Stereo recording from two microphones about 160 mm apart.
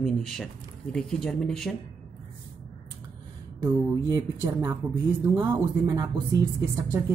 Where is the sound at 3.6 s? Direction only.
20° right (ahead or behind).